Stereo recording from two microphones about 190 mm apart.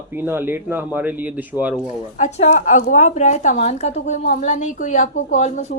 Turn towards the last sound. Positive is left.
turn(degrees=40)  # may be behind; listen again after turning